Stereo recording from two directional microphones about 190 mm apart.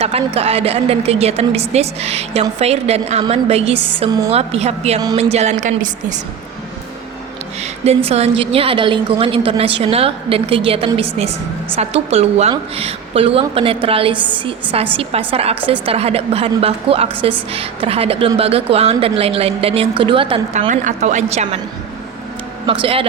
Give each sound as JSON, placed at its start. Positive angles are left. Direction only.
{"t": 0.0, "sound": "a woman's voice", "side_deg": -30}
{"t": 7.6, "sound": "a woman's voice", "side_deg": -35}
{"t": 20.6, "sound": "a woman's voice", "side_deg": -40}
{"t": 22.6, "sound": "a woman's voice", "side_deg": -30}